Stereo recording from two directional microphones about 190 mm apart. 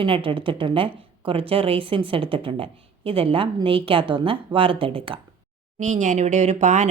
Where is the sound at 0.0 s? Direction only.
25° right (ahead or behind).